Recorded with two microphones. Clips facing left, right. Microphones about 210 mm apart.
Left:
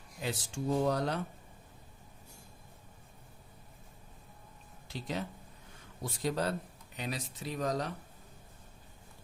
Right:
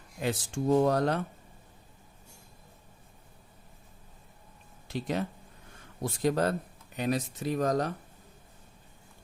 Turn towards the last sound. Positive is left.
turn(degrees=-50)  # may be behind; listen again after turning